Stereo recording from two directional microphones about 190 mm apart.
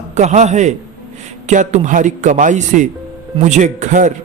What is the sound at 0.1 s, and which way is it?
A man's voice, 35° right (ahead or behind).